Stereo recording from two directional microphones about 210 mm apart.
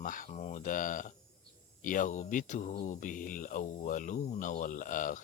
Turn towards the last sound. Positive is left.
turn(degrees=40)  # may be behind; listen again after turning